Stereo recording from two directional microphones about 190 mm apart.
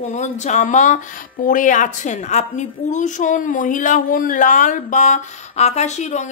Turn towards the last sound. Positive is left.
turn(degrees=35)  # may be behind; listen again after turning